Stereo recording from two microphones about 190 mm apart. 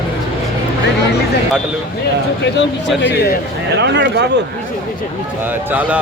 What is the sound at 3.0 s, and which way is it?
Speech, 60° left (ahead or behind).